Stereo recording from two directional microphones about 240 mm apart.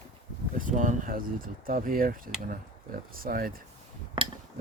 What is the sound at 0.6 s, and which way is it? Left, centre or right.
Speech, right.